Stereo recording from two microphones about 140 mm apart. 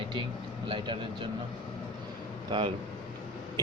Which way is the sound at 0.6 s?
35° right (ahead or behind).